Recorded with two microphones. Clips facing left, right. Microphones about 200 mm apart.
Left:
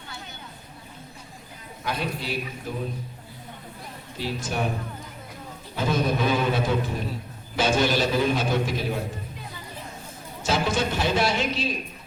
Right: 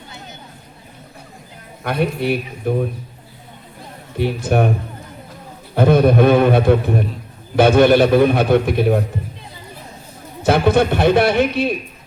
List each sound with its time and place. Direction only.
1.8 s a man's voice: 60° right (ahead or behind)
4.2 s a man's voice: 60° right (ahead or behind)
5.7 s a man's voice: 60° right (ahead or behind)
10.4 s a man's voice: 60° right (ahead or behind)